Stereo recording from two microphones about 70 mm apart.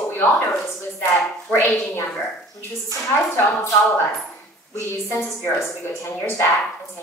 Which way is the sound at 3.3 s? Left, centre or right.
Left.